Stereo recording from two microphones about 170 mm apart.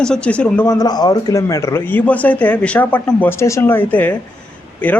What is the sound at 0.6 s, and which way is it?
Speech, 20° left (ahead or behind).